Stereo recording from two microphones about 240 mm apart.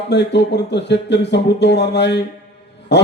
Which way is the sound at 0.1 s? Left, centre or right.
Left.